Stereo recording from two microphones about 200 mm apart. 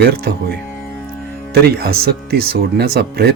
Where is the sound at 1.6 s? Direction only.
50° right (ahead or behind).